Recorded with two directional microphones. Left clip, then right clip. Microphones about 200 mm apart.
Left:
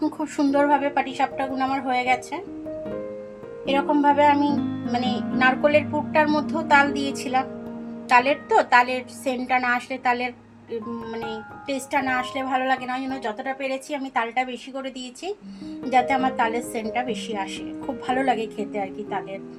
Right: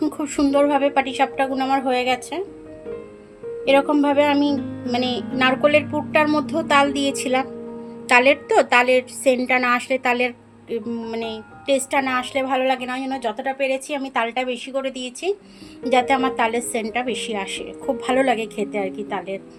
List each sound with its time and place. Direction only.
0.0 s a woman's voice: 55° right (ahead or behind)
3.9 s a woman's voice: 60° right (ahead or behind)